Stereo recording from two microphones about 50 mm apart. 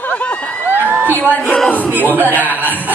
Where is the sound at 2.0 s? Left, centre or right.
Right.